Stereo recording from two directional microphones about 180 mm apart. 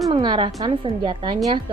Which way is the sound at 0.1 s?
25° right (ahead or behind).